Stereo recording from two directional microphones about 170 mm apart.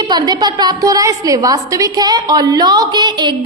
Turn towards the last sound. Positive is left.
turn(degrees=-25)  # may be behind; listen again after turning